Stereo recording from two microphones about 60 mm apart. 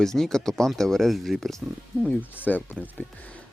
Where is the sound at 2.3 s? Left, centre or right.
Left.